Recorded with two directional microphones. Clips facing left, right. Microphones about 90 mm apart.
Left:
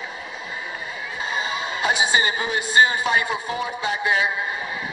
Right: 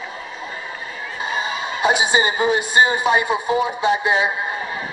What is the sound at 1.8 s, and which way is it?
A man's voice, 20° right (ahead or behind).